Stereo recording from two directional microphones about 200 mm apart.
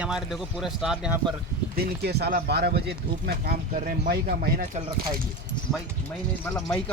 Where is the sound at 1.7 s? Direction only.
55° right (ahead or behind).